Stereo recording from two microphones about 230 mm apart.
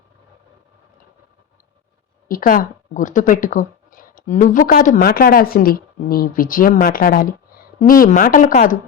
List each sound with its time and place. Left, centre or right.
2.2 s speech: left